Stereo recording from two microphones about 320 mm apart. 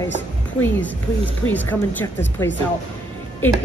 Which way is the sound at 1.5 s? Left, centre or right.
Centre.